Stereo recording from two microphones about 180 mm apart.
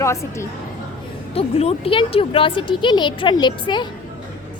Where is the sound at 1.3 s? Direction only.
35° left (ahead or behind).